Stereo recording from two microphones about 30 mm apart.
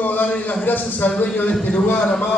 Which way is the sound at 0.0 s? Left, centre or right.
Left.